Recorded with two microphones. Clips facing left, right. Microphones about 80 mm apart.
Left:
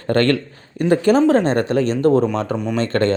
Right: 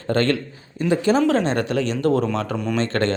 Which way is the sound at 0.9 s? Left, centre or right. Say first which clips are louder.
Left 4 dB; left.